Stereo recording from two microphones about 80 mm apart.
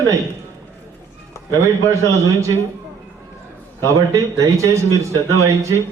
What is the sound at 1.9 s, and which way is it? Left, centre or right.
Speech, right.